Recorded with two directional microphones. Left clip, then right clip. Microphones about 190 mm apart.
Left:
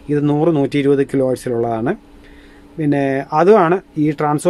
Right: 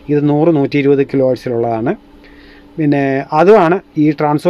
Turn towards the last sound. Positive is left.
turn(degrees=-15)  # may be behind; listen again after turning